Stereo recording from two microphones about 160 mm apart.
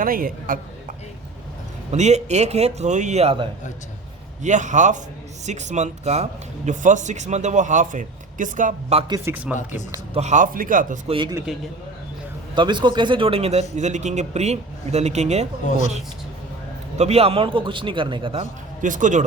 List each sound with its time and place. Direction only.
0.0 s a man's voice: 60° right (ahead or behind)
1.9 s speech: 45° right (ahead or behind)
4.4 s speech: 50° right (ahead or behind)
9.0 s speech: 25° right (ahead or behind)
9.2 s speech: 10° right (ahead or behind)
10.2 s a man's voice: 50° right (ahead or behind)
11.1 s a man's voice: 30° right (ahead or behind)
12.5 s speech: 30° right (ahead or behind)
17.0 s a man's voice: 40° right (ahead or behind)
18.8 s speech: 55° right (ahead or behind)